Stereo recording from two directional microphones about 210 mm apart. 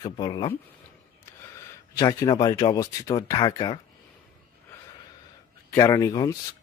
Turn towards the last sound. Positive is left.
turn(degrees=15)  # may be behind; listen again after turning